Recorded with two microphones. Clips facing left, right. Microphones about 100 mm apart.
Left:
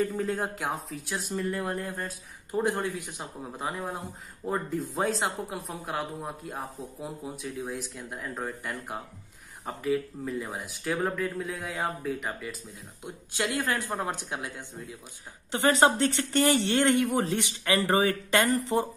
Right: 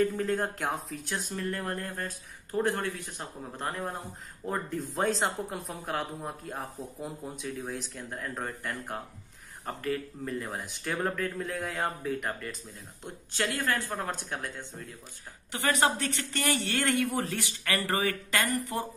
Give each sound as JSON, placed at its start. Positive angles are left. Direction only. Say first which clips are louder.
{"t": 0.1, "sound": "speech", "louder": "even", "side_deg": 5}
{"t": 13.0, "sound": "speech", "louder": "left 1 dB", "side_deg": 15}
{"t": 15.5, "sound": "speech", "louder": "left 5 dB", "side_deg": 25}